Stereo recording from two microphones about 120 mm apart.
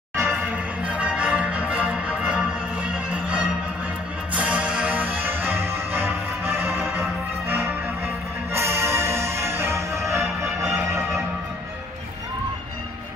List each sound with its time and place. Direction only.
0.8 s music: 10° right (ahead or behind)